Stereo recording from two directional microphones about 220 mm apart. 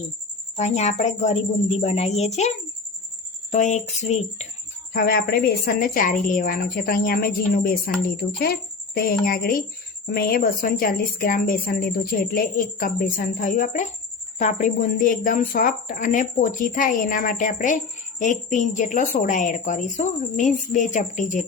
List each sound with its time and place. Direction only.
0.5 s a woman's voice: 30° left (ahead or behind)
3.5 s a woman's voice: 35° left (ahead or behind)
4.9 s a woman's voice: 40° left (ahead or behind)